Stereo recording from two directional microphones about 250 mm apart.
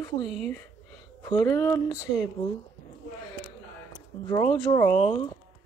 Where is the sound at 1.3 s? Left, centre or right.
Centre.